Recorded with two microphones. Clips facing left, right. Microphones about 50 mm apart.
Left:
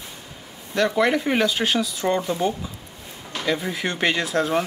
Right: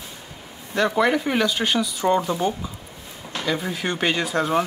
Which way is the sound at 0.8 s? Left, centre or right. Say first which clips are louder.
Right 1 dB; centre.